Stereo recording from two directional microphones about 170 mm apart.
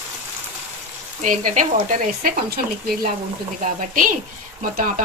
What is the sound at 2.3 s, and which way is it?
Speech, 60° right (ahead or behind).